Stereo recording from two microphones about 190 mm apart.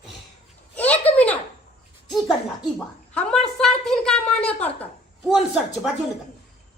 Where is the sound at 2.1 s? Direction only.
Centre (ahead or behind).